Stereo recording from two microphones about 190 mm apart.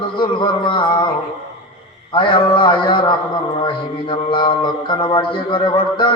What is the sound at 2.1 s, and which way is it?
A man's voice, 25° left (ahead or behind).